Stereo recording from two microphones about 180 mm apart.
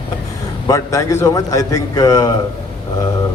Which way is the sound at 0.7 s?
15° left (ahead or behind).